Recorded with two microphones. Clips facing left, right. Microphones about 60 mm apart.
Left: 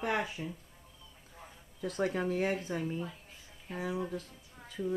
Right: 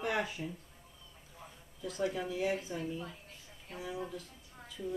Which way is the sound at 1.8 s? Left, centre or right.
Left.